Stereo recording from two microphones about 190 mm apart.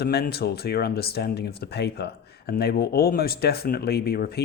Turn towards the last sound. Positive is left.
turn(degrees=55)  # may be behind; listen again after turning